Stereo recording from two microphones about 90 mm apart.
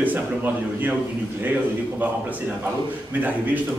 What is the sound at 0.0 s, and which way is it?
Speech, 20° right (ahead or behind).